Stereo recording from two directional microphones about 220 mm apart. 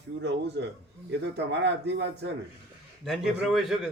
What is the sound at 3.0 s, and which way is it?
Speech, centre (ahead or behind).